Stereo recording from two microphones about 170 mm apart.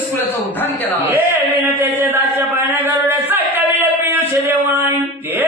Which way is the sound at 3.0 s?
10° right (ahead or behind).